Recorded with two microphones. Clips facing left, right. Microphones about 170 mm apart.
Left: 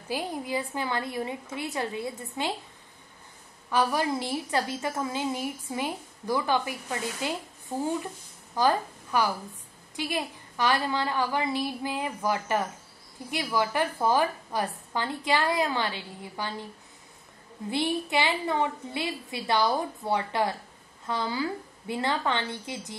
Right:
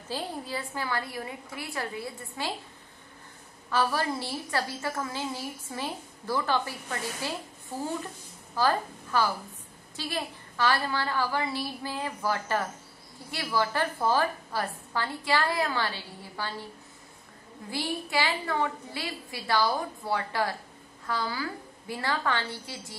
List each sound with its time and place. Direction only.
0.1 s a woman's voice: 15° left (ahead or behind)
3.7 s a woman's voice: 15° left (ahead or behind)
8.5 s a woman's voice: 15° left (ahead or behind)
17.6 s a woman's voice: 20° left (ahead or behind)